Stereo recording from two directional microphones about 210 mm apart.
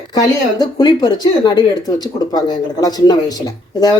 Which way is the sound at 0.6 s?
20° left (ahead or behind).